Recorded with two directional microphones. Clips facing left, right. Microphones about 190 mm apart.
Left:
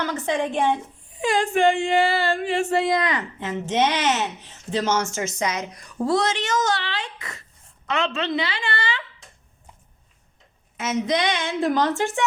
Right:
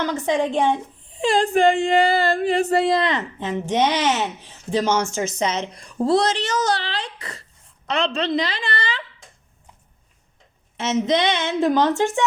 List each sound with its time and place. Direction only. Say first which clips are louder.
0.0 s a woman's voice: right 3 dB; 15° right (ahead or behind)
1.1 s speech: right 3 dB; 30° right (ahead or behind)
10.8 s a woman's voice: right 3 dB; 25° right (ahead or behind)